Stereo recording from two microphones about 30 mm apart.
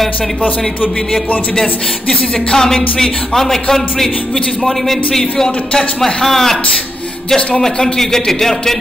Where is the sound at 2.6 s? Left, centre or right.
Centre.